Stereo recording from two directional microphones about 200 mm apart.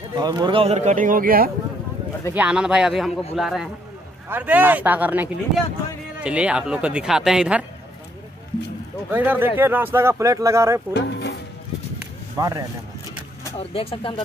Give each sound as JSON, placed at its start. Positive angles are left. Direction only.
{"t": 0.2, "sound": "speech", "side_deg": -20}
{"t": 2.3, "sound": "speech", "side_deg": -5}
{"t": 9.1, "sound": "speech", "side_deg": -10}
{"t": 10.9, "sound": "music", "side_deg": 60}
{"t": 12.4, "sound": "speech", "side_deg": -15}
{"t": 13.6, "sound": "speech", "side_deg": 30}